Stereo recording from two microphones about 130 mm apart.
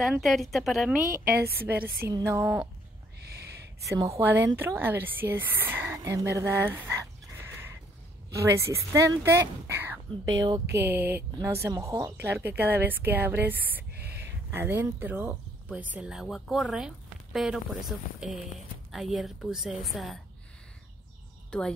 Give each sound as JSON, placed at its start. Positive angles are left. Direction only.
{"t": 0.2, "sound": "speech", "side_deg": 0}
{"t": 1.3, "sound": "a woman's voice", "side_deg": -15}
{"t": 4.2, "sound": "a woman's voice", "side_deg": -15}
{"t": 21.5, "sound": "a woman's voice", "side_deg": 5}